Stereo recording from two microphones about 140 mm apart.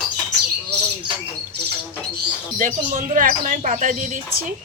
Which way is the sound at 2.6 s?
70° right (ahead or behind).